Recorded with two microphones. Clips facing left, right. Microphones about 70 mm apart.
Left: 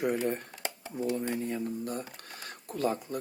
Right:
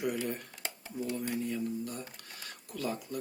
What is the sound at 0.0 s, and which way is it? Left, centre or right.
Speech, left.